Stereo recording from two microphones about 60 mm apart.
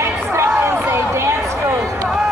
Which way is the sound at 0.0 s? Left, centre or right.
Right.